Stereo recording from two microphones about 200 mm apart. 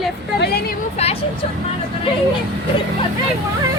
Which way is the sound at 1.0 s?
30° left (ahead or behind).